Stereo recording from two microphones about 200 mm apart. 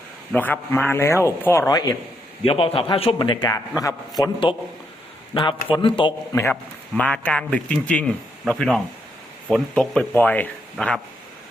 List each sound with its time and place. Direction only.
0.3 s a man's voice: 10° left (ahead or behind); by 6.1 s 25° left (ahead or behind)
6.3 s speech: 10° left (ahead or behind)